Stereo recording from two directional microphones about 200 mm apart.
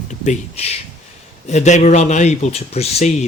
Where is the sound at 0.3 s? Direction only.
30° left (ahead or behind).